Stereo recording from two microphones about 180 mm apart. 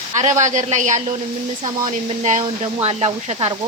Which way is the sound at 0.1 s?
40° right (ahead or behind).